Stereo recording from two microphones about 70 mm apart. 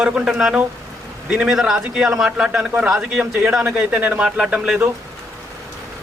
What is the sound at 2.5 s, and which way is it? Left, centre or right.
Speech, centre.